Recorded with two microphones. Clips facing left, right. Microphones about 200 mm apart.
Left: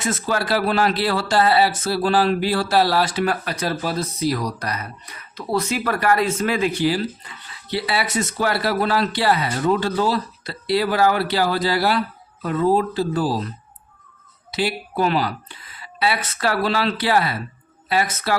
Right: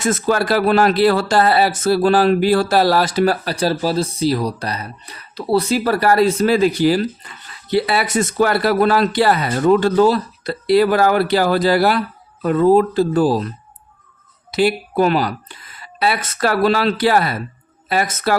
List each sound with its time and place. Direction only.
0.0 s a man's voice: 45° right (ahead or behind)
14.5 s a man's voice: 50° right (ahead or behind)